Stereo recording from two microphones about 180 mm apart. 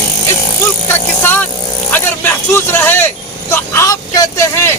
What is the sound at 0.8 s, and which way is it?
Vehicle, 10° left (ahead or behind).